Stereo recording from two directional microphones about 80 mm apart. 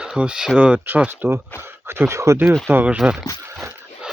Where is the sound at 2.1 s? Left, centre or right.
Right.